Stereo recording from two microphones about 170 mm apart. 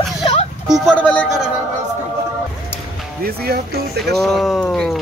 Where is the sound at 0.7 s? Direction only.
5° left (ahead or behind).